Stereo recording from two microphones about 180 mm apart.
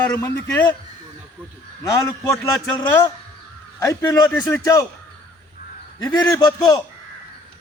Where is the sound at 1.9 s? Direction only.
15° left (ahead or behind).